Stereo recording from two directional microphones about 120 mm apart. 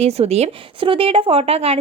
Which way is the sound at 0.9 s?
50° right (ahead or behind).